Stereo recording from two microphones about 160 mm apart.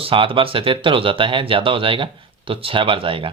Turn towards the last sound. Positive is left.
turn(degrees=-35)  # may be behind; listen again after turning